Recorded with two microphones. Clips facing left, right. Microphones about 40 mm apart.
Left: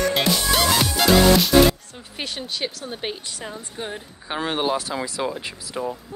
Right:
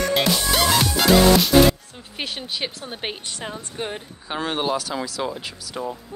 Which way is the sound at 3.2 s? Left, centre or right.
Right.